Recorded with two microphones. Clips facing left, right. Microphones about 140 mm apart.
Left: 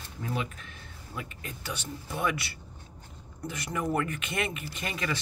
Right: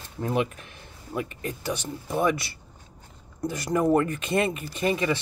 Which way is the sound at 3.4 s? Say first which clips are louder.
Right 9 dB; 40° right (ahead or behind).